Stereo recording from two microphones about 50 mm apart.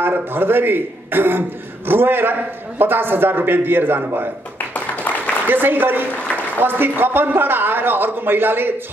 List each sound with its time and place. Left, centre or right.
0.0 s a man's voice: right
4.6 s a sound: left
5.5 s a man's voice: right